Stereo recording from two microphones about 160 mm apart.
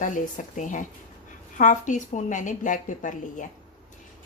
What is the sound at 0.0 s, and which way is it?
Speech, 50° left (ahead or behind).